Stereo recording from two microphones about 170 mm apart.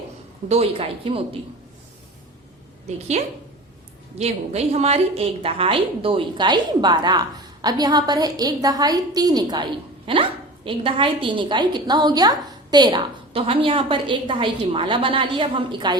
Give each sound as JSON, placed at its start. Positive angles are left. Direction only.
{"t": 0.4, "sound": "speech", "side_deg": -35}
{"t": 4.2, "sound": "a woman's voice", "side_deg": -40}